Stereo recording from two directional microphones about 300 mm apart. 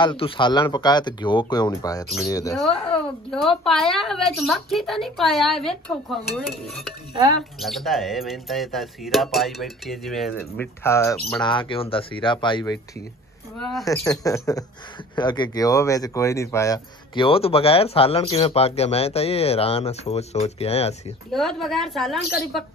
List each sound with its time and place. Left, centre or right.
0.0 s speech: centre
7.6 s speech: centre
13.6 s speech: centre
21.3 s speech: centre